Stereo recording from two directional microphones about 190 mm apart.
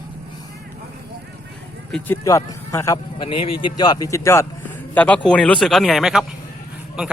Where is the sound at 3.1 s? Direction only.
25° left (ahead or behind); by 7.1 s 5° right (ahead or behind).